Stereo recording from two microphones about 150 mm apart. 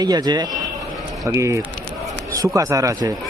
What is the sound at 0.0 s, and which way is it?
Speech, 25° right (ahead or behind).